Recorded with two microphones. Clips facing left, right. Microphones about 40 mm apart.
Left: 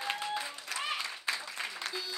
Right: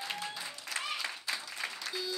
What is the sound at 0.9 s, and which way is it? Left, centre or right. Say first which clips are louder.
Applause: left 4 dB; left.